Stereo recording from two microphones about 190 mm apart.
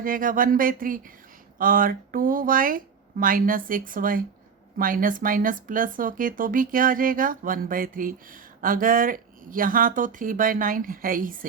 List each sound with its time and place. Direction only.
0.0 s speech: 45° right (ahead or behind)